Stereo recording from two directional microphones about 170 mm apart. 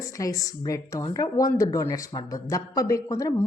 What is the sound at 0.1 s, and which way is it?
Speech, 20° left (ahead or behind).